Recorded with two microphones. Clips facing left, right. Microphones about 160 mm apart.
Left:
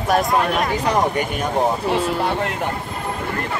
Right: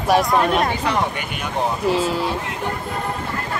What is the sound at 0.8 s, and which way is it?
Speech, 40° left (ahead or behind).